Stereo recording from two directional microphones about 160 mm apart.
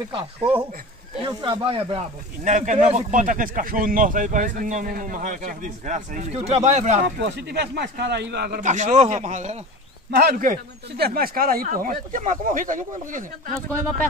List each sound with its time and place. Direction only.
0.4 s speech: 10° right (ahead or behind)
1.4 s speech: 30° right (ahead or behind)
2.4 s speech: 50° right (ahead or behind)
7.2 s speech: 90° right
8.5 s speech: 50° right (ahead or behind)
10.1 s speech: 70° right (ahead or behind)